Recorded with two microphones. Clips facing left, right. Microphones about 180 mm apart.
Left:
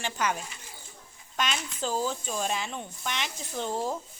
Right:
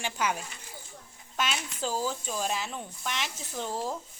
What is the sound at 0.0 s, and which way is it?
Speech, 10° right (ahead or behind).